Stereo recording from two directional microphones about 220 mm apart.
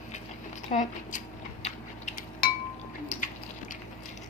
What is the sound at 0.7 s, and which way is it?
Speech, 35° left (ahead or behind).